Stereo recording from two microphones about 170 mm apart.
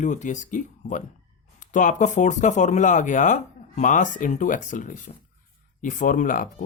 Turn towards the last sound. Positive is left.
turn(degrees=50)  # may be behind; listen again after turning